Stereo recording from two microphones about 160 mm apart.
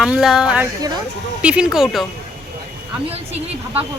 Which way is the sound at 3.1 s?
40° right (ahead or behind).